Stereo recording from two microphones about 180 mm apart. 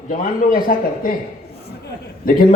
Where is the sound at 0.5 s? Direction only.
50° left (ahead or behind).